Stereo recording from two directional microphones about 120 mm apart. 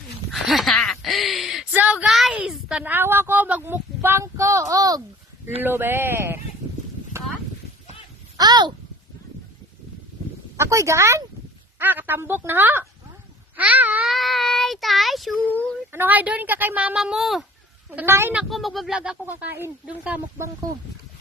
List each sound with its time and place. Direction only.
0.3 s a sound: centre (ahead or behind)
1.7 s a sound: 15° right (ahead or behind)
2.0 s a sound: centre (ahead or behind)
2.9 s speech: 20° right (ahead or behind)
5.6 s speech: 20° right (ahead or behind)
8.4 s a child's voice: 35° right (ahead or behind)
10.6 s speech: 25° right (ahead or behind)
14.1 s speech: centre (ahead or behind)
15.4 s speech: 15° left (ahead or behind)
15.9 s speech: 15° right (ahead or behind)
17.9 s speech: 20° right (ahead or behind)
18.4 s speech: centre (ahead or behind)
19.2 s speech: 15° right (ahead or behind)